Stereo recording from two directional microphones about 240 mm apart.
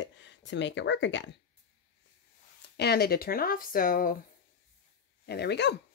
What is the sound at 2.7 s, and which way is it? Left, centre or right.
Speech, left.